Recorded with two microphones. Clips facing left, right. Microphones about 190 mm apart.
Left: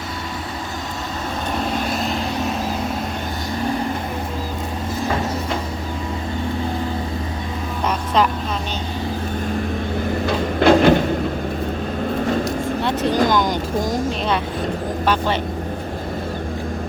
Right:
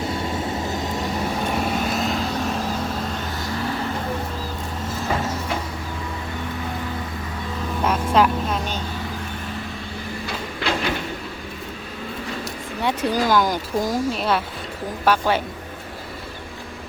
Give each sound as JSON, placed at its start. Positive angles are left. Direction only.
{"t": 1.5, "sound": "vehicle", "side_deg": -10}
{"t": 7.9, "sound": "vehicle", "side_deg": -5}
{"t": 10.2, "sound": "a sound", "side_deg": 55}
{"t": 12.8, "sound": "vehicle", "side_deg": -10}
{"t": 15.0, "sound": "speech", "side_deg": -10}